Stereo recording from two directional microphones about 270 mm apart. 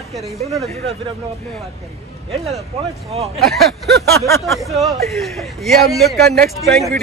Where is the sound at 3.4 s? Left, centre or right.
Right.